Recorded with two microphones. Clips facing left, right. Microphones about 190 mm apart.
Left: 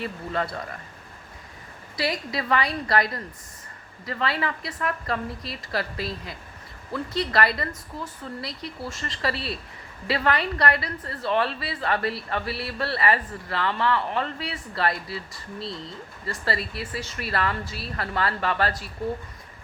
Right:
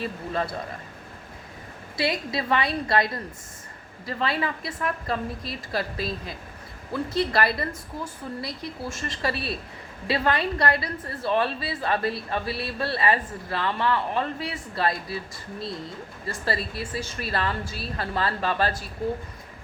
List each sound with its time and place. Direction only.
0.0 s a woman's voice: 20° right (ahead or behind)
2.0 s a woman's voice: 25° right (ahead or behind)
4.1 s a woman's voice: 20° right (ahead or behind)
16.2 s a woman's voice: 25° right (ahead or behind)